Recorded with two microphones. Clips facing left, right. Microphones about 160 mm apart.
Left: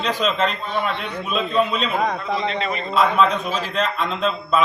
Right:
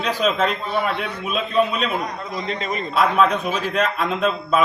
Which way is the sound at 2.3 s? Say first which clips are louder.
Left 3 dB; 45° right (ahead or behind).